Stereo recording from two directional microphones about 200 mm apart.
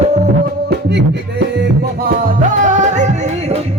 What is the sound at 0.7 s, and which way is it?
Music, 55° right (ahead or behind).